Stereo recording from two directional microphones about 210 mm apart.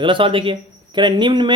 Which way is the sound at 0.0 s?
25° right (ahead or behind).